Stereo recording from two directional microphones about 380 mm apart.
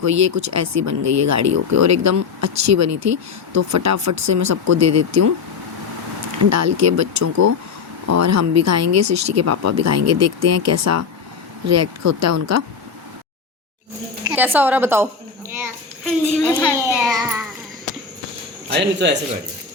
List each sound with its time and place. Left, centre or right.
0.0 s speech: right
6.4 s speech: right
14.3 s a child's voice: centre
16.7 s a child's voice: centre
18.7 s a man's voice: right